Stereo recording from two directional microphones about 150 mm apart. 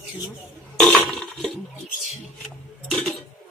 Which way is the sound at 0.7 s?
5° left (ahead or behind).